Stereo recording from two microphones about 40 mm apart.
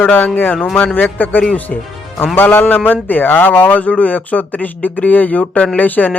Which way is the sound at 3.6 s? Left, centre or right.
Left.